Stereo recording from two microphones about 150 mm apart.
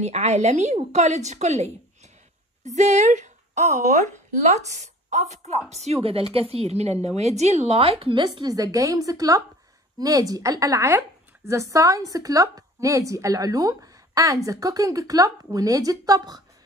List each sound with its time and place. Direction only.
0.0 s a woman's voice: 45° right (ahead or behind); by 16.4 s 25° right (ahead or behind)